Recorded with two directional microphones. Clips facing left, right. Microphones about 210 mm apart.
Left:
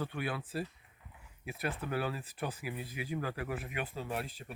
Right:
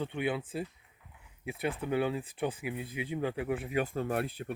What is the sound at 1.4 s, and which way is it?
Speech, 20° right (ahead or behind).